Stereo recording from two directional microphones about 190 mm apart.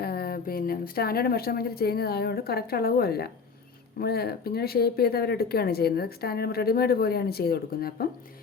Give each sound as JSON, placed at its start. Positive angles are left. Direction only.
{"t": 0.0, "sound": "speech", "side_deg": 55}